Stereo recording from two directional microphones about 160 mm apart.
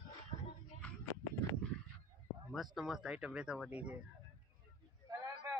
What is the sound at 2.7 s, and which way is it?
Speech, centre (ahead or behind).